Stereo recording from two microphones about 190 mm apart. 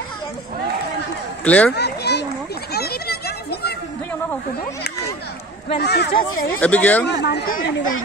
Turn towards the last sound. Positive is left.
turn(degrees=60)  # may be behind; listen again after turning